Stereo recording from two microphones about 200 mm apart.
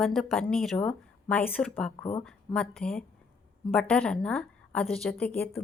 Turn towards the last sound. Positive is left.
turn(degrees=5)  # may be behind; listen again after turning